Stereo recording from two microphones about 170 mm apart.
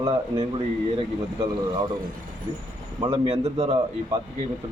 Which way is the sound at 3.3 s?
35° right (ahead or behind).